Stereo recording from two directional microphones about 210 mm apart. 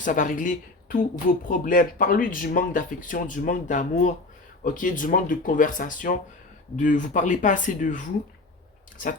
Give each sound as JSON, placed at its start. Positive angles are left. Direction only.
{"t": 0.0, "sound": "speech", "side_deg": 40}